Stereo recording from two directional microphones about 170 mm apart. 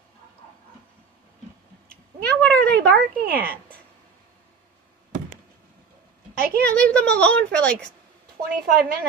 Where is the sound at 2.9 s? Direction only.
60° right (ahead or behind).